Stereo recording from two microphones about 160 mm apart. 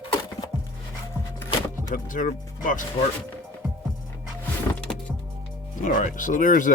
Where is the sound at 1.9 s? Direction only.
55° left (ahead or behind).